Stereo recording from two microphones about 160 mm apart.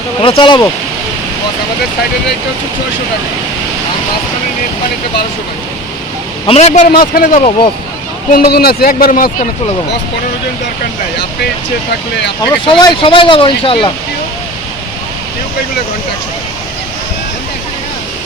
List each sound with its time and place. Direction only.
0.2 s speech: 30° left (ahead or behind)
6.4 s a man's voice: 40° left (ahead or behind)
6.9 s a man's voice: 65° left (ahead or behind)
12.5 s speech: 30° left (ahead or behind)